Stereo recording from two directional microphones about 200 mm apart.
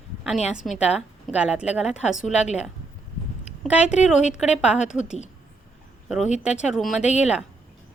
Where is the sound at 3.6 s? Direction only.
5° right (ahead or behind).